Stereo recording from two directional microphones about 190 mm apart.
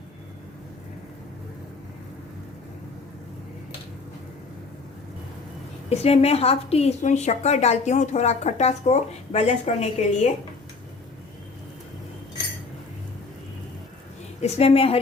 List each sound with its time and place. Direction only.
5.9 s a woman's voice: 35° left (ahead or behind)
14.4 s a woman's voice: 35° left (ahead or behind)